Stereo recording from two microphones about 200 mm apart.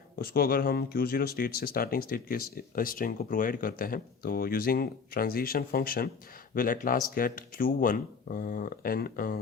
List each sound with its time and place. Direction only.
0.2 s speech: 50° left (ahead or behind)